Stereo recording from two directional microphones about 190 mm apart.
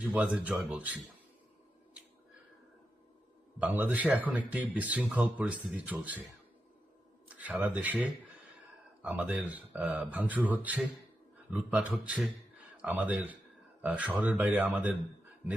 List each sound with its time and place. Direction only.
0.0 s speech: 5° right (ahead or behind)
3.6 s speech: 10° right (ahead or behind)
7.3 s speech: 10° right (ahead or behind)